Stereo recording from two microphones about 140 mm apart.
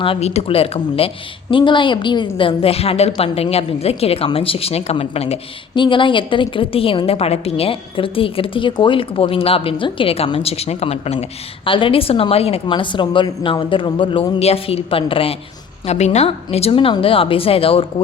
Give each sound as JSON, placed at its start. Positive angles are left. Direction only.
{"t": 0.0, "sound": "a woman's voice", "side_deg": 45}
{"t": 12.6, "sound": "speech", "side_deg": 35}
{"t": 15.9, "sound": "speech", "side_deg": 55}